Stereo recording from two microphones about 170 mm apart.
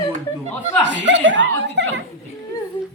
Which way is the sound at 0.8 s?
90° right.